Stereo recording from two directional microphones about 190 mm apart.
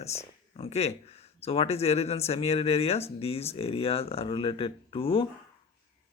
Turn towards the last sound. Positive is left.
turn(degrees=30)  # may be behind; listen again after turning